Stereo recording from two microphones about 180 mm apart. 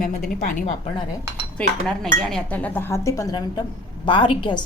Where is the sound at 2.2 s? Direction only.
5° left (ahead or behind); by 4.6 s 25° left (ahead or behind).